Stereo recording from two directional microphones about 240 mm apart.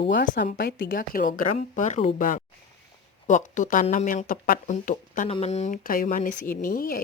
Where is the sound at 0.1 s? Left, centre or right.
Left.